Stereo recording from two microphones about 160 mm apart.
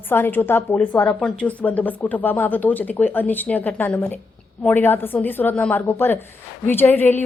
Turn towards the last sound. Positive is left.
turn(degrees=10)  # may be behind; listen again after turning